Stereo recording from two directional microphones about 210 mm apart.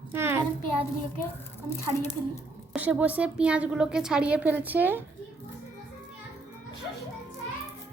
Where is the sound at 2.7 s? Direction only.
5° right (ahead or behind).